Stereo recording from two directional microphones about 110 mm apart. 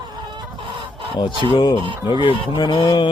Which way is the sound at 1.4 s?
45° left (ahead or behind).